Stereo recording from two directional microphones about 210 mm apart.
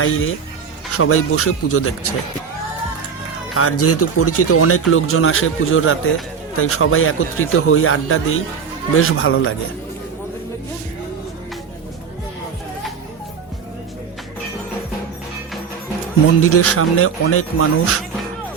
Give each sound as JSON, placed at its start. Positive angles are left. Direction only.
{"t": 0.0, "sound": "a man's voice", "side_deg": 75}
{"t": 0.9, "sound": "speech", "side_deg": 90}
{"t": 3.5, "sound": "speech", "side_deg": 90}
{"t": 6.6, "sound": "speech", "side_deg": 85}
{"t": 9.0, "sound": "a man's voice", "side_deg": 75}
{"t": 16.4, "sound": "speech", "side_deg": 90}